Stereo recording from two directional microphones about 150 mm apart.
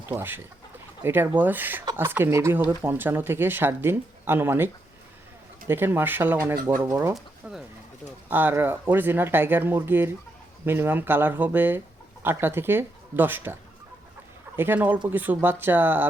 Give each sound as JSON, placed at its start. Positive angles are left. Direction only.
{"t": 0.0, "sound": "speech", "side_deg": -15}
{"t": 7.4, "sound": "speech", "side_deg": -10}